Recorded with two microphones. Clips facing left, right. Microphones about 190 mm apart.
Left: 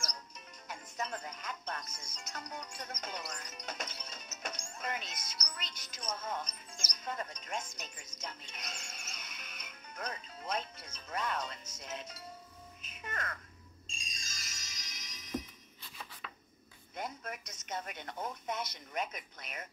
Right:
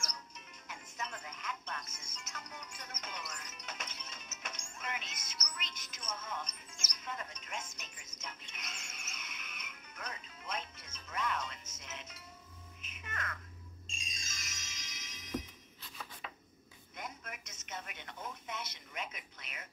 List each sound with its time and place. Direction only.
0.7 s music: 35° left (ahead or behind)
12.8 s speech: 35° left (ahead or behind)
13.8 s music: 35° left (ahead or behind)
16.9 s a woman's voice: 35° left (ahead or behind)